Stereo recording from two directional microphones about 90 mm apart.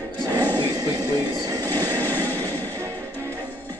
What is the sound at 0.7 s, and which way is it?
Speech, 45° right (ahead or behind).